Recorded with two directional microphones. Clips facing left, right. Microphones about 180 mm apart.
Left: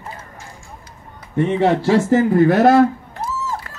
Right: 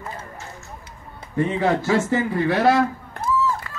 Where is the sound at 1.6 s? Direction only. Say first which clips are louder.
Left 5 dB; 30° left (ahead or behind); by 2.8 s 45° left (ahead or behind).